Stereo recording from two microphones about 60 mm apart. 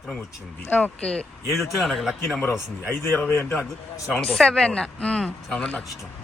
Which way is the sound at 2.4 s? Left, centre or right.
Left.